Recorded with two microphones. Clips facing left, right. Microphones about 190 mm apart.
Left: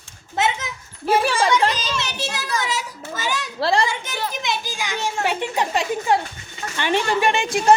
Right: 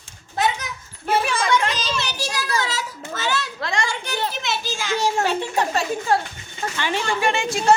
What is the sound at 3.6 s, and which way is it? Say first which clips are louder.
Speech: left 7 dB; 35° left (ahead or behind).